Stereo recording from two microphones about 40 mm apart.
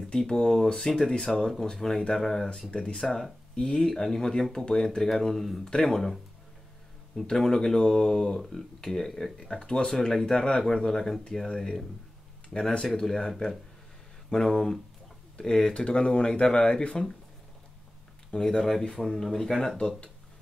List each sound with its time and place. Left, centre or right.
0.3 s speech: centre
7.2 s speech: centre
18.3 s speech: centre
18.6 s speech: centre